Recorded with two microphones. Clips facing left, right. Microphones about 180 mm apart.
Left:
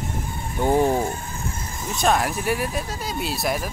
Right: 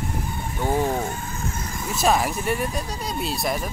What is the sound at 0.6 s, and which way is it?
Speech, 20° left (ahead or behind).